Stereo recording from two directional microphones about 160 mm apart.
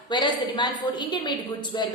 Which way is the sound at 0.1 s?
30° left (ahead or behind).